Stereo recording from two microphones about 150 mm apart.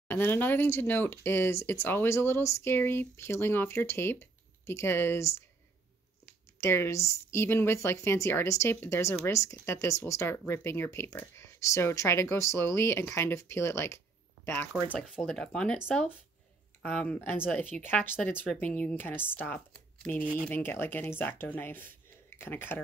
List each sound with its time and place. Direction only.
0.1 s speech: 10° left (ahead or behind)
6.6 s speech: 15° left (ahead or behind)
14.7 s speech: 5° left (ahead or behind)
16.8 s speech: 10° left (ahead or behind)